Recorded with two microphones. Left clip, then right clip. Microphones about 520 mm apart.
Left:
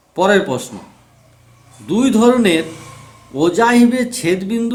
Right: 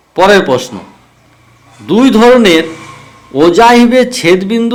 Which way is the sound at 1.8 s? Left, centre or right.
Left.